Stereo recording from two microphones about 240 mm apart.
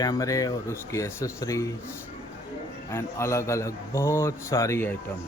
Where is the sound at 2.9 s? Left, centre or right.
Centre.